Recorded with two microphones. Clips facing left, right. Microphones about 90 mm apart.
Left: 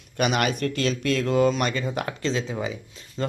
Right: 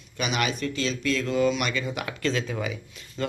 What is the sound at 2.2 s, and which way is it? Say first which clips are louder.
Speech: right 1 dB; 25° left (ahead or behind).